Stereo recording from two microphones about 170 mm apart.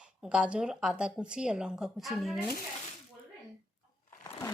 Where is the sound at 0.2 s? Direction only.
5° right (ahead or behind).